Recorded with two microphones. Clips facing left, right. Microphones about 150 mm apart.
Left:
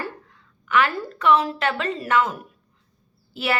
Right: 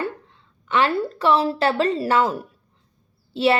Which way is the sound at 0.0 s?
25° right (ahead or behind).